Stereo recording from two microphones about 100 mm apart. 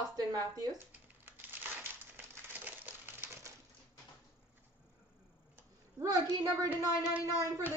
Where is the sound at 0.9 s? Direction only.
20° right (ahead or behind).